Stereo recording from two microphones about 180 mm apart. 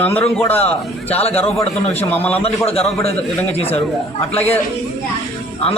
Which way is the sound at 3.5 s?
35° left (ahead or behind).